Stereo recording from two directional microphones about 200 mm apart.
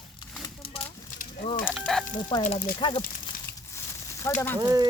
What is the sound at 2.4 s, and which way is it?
Speech, 40° left (ahead or behind).